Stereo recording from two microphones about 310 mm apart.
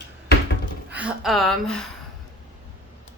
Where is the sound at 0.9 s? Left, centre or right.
Centre.